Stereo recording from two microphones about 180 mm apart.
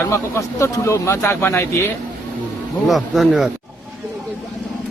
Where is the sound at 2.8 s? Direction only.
Centre (ahead or behind).